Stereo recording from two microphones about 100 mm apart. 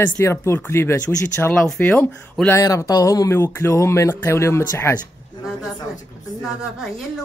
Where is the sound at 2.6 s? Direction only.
30° left (ahead or behind).